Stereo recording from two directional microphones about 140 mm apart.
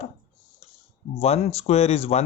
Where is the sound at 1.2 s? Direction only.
45° left (ahead or behind).